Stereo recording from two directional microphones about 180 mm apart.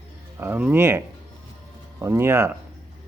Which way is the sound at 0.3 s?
10° right (ahead or behind).